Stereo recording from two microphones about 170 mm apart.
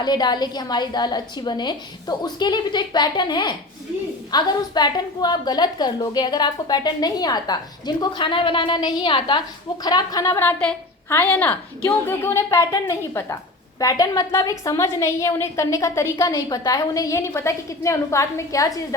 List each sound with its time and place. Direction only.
0.0 s a woman's voice: 25° left (ahead or behind)
10.6 s a woman's voice: 10° left (ahead or behind)